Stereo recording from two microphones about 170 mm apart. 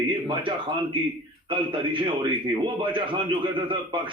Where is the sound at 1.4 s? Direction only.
30° right (ahead or behind).